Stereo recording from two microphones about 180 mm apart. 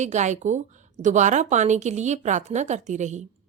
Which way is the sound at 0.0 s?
40° right (ahead or behind).